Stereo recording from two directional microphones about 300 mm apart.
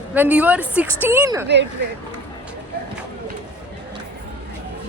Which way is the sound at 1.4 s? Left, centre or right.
Right.